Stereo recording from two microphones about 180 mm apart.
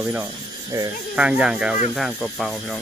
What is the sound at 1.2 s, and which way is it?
Speech, 5° right (ahead or behind).